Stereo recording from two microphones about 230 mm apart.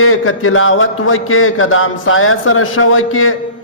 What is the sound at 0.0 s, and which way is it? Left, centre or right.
A man's voice, left.